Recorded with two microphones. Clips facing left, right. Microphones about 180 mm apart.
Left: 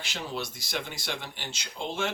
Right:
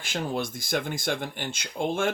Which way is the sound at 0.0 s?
50° right (ahead or behind).